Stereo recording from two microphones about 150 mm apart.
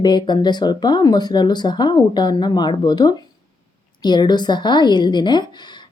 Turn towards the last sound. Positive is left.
turn(degrees=30)  # may be behind; listen again after turning